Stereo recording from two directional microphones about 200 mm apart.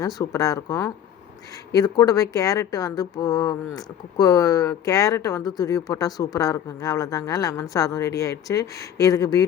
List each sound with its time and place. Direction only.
0.0 s speech: 20° left (ahead or behind)